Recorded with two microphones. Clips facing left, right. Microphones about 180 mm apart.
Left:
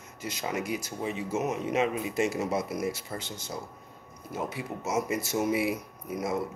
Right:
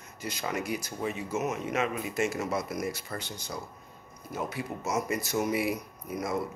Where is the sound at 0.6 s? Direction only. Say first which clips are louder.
Even; 25° left (ahead or behind).